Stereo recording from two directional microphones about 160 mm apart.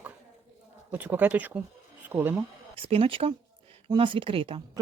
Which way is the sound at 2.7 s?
35° right (ahead or behind).